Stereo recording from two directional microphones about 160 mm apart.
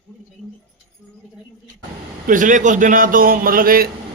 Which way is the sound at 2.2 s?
55° right (ahead or behind).